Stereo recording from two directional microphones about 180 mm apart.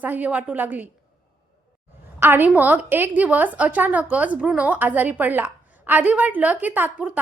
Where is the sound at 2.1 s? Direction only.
10° right (ahead or behind).